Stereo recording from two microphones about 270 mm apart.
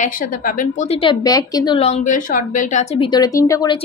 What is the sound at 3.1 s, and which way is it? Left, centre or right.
Speech, centre.